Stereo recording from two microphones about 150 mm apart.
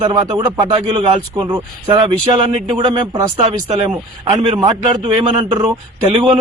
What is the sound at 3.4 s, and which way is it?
Speech, 45° right (ahead or behind).